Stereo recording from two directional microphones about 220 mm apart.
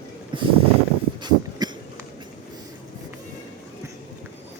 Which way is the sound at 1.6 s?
20° right (ahead or behind).